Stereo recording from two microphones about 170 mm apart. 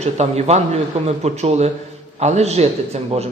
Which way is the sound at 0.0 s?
40° right (ahead or behind).